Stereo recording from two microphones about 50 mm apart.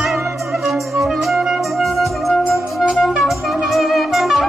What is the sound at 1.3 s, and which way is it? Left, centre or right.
Music, centre.